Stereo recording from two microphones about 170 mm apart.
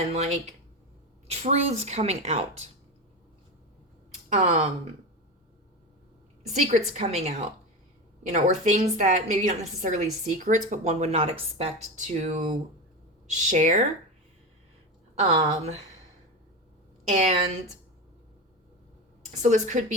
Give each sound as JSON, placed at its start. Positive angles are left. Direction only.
{"t": 0.1, "sound": "a woman's voice", "side_deg": -40}
{"t": 4.4, "sound": "a woman's voice", "side_deg": -40}
{"t": 6.5, "sound": "a woman's voice", "side_deg": -45}
{"t": 15.1, "sound": "a woman's voice", "side_deg": -40}
{"t": 17.2, "sound": "a woman's voice", "side_deg": -40}
{"t": 19.3, "sound": "a woman's voice", "side_deg": -45}